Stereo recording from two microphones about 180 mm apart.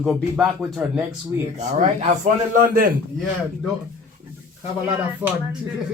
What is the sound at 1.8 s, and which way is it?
Speech, 40° right (ahead or behind).